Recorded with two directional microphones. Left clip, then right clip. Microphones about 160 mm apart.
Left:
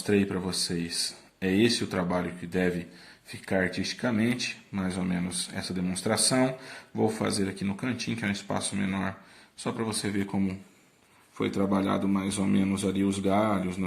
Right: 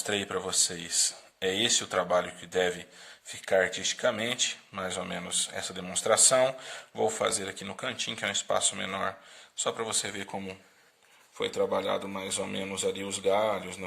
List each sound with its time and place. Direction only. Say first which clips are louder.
0.0 s speech: left 3 dB; 40° right (ahead or behind); by 13.8 s 25° right (ahead or behind)